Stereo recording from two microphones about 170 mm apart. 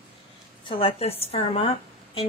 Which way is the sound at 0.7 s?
30° left (ahead or behind).